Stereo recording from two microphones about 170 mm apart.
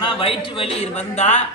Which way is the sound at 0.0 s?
30° left (ahead or behind).